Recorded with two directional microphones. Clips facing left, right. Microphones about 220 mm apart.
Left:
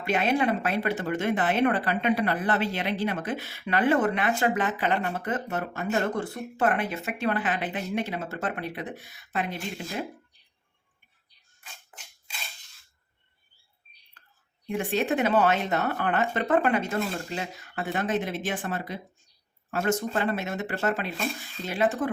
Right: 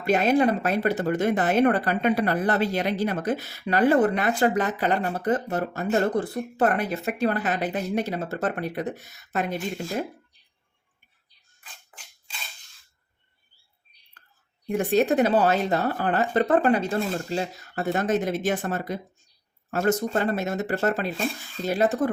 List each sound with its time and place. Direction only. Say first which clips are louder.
0.0 s speech: right 5 dB; 40° right (ahead or behind)
14.7 s speech: right 5 dB; 40° right (ahead or behind)